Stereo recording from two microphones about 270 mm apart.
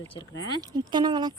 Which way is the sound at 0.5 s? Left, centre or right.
Centre.